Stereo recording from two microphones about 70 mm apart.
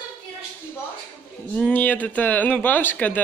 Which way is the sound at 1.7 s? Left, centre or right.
Left.